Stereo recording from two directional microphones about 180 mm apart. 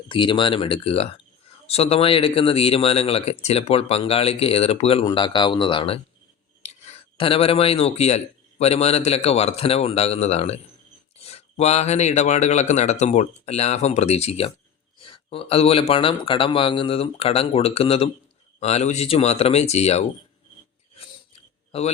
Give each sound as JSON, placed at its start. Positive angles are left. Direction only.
{"t": 0.1, "sound": "speech", "side_deg": 25}
{"t": 15.0, "sound": "a sound", "side_deg": 30}
{"t": 15.9, "sound": "speech", "side_deg": 30}
{"t": 21.7, "sound": "a man's voice", "side_deg": 35}